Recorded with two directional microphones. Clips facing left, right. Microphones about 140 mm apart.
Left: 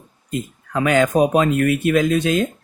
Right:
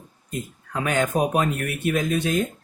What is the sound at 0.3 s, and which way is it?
Speech, 90° left.